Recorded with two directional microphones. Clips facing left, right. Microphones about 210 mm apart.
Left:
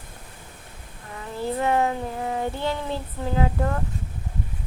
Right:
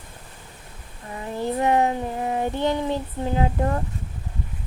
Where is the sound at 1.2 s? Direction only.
20° right (ahead or behind).